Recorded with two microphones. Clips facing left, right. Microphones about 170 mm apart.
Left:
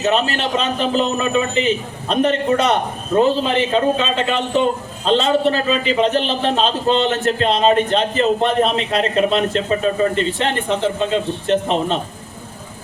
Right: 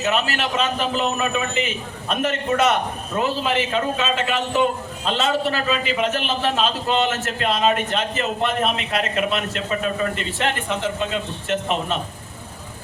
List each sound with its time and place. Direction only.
0.0 s a man's voice: 30° left (ahead or behind)